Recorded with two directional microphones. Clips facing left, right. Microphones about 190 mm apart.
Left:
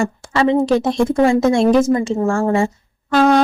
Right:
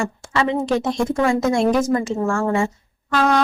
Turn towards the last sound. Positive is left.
turn(degrees=35)  # may be behind; listen again after turning